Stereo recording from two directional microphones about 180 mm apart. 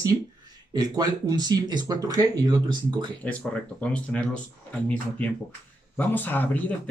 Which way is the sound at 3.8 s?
5° left (ahead or behind).